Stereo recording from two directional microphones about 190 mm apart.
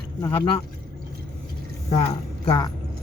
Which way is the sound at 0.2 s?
25° left (ahead or behind).